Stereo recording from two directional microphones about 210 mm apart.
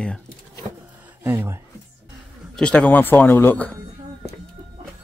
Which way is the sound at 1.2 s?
10° right (ahead or behind).